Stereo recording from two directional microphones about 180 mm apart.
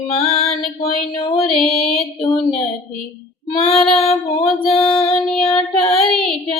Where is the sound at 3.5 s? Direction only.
30° left (ahead or behind).